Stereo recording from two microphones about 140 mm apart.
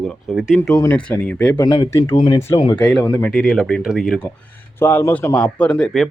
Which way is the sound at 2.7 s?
5° left (ahead or behind).